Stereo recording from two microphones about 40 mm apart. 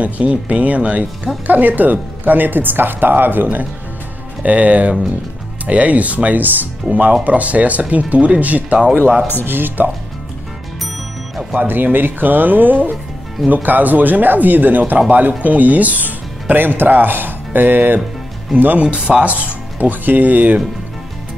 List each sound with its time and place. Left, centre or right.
0.0 s speech: right
4.5 s speech: right
9.5 s speech: right
11.5 s speech: right
18.5 s speech: right